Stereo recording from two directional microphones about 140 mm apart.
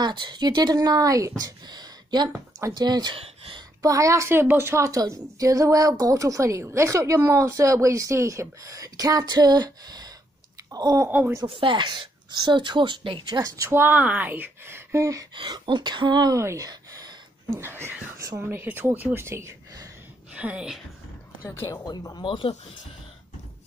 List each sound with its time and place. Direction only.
0.0 s a woman's voice: 35° right (ahead or behind)
3.8 s a woman's voice: 25° right (ahead or behind)
11.1 s speech: 15° right (ahead or behind)
11.4 s a woman's voice: 40° right (ahead or behind); by 15.2 s 20° right (ahead or behind)
15.3 s speech: 35° right (ahead or behind); by 18.1 s 15° right (ahead or behind)
18.1 s speech: 25° right (ahead or behind)
18.4 s speech: 15° right (ahead or behind)
20.3 s speech: 10° right (ahead or behind)
21.5 s speech: 20° left (ahead or behind)
21.8 s speech: 30° left (ahead or behind)